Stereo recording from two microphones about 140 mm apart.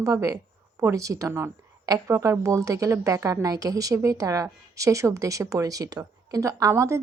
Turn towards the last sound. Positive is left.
turn(degrees=-20)  # may be behind; listen again after turning